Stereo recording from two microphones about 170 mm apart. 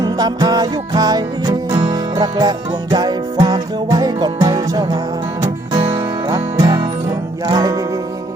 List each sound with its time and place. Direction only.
0.0 s music: 20° right (ahead or behind)